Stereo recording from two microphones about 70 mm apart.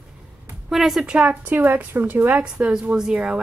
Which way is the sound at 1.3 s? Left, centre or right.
Right.